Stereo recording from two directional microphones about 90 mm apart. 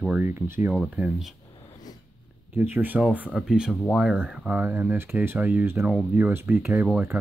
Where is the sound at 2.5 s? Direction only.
20° right (ahead or behind).